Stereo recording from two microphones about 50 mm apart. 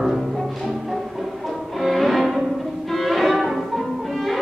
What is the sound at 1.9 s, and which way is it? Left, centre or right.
Music, centre.